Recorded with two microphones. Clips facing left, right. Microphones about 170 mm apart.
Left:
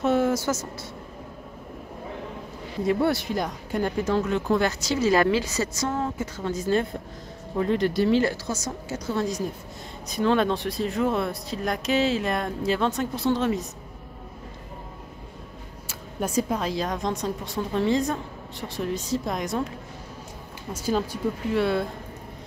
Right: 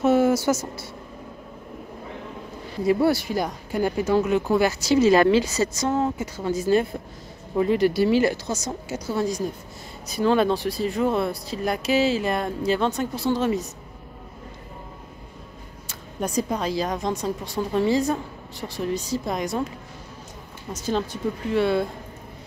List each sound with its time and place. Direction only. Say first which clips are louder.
0.0 s speech: right 4 dB; 5° right (ahead or behind)
2.9 s speech: right 3 dB; centre (ahead or behind)
5.0 s a woman's voice: right 3 dB; 25° right (ahead or behind)
6.2 s speech: right 3 dB; 10° right (ahead or behind)
9.1 s speech: right 2 dB; centre (ahead or behind)
15.9 s speech: even; 5° left (ahead or behind)
20.7 s speech: even; 5° left (ahead or behind)